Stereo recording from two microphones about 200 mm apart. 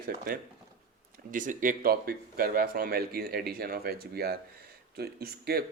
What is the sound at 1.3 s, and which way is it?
Speech, 40° right (ahead or behind).